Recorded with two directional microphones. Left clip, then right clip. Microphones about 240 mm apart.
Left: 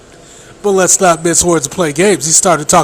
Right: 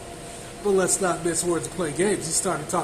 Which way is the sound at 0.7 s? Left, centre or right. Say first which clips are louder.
Left 13 dB; left.